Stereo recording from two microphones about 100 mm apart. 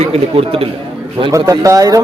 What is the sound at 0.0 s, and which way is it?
Speech, 75° right (ahead or behind).